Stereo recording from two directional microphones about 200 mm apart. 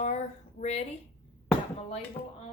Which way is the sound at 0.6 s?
35° left (ahead or behind).